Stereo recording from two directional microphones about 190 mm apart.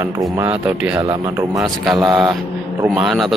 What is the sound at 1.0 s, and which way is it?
Speech, 20° right (ahead or behind).